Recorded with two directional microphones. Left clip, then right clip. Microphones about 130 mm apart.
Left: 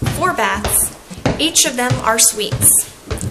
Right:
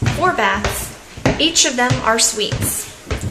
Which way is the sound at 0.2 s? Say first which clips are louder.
Right 1 dB; 10° right (ahead or behind).